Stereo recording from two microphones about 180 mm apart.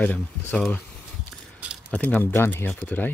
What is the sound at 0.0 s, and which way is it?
Speech, 10° left (ahead or behind).